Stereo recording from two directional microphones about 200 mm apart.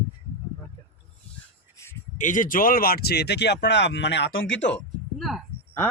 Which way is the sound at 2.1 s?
40° left (ahead or behind).